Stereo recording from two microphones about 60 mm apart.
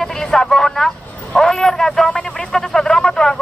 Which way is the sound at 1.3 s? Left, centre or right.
Centre.